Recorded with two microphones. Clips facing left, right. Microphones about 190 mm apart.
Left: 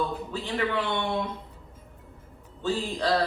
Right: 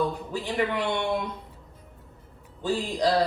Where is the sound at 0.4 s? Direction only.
15° right (ahead or behind).